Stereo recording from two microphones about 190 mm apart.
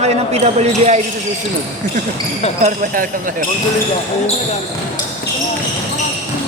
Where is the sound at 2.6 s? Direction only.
40° right (ahead or behind).